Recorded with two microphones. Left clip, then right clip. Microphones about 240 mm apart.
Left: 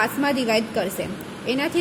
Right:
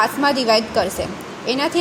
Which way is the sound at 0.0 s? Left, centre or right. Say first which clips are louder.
Right 5 dB; centre.